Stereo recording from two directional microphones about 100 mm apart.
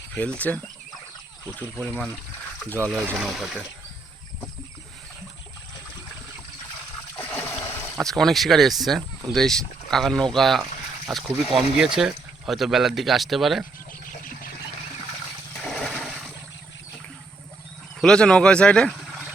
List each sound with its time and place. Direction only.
0.1 s speech: 10° left (ahead or behind)
2.6 s speech: 15° left (ahead or behind)
3.2 s speech: 5° right (ahead or behind)
7.9 s speech: 5° left (ahead or behind)
15.6 s a sound: 5° left (ahead or behind)
18.0 s speech: 10° left (ahead or behind)